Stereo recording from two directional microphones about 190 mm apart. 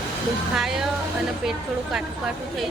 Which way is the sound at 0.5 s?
Centre (ahead or behind).